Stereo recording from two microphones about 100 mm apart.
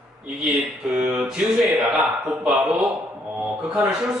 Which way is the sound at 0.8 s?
10° right (ahead or behind).